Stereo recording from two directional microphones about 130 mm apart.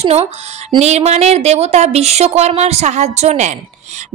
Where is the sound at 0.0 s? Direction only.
55° right (ahead or behind).